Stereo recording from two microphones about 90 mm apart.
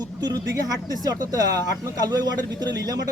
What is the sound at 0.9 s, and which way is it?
Speech, 45° right (ahead or behind).